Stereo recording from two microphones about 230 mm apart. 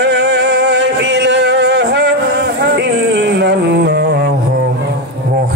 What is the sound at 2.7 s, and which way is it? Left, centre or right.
Music, right.